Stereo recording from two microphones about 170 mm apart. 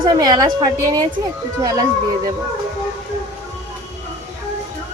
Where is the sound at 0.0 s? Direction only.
25° right (ahead or behind).